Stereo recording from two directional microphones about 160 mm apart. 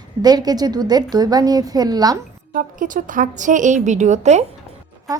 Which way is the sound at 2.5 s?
55° right (ahead or behind).